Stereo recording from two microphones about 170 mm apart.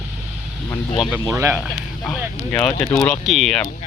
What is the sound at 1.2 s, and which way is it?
Speech, 20° right (ahead or behind).